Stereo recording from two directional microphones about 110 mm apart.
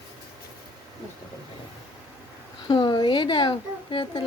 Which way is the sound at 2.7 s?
45° left (ahead or behind).